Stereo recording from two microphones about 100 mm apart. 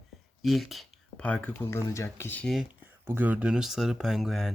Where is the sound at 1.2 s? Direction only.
10° left (ahead or behind).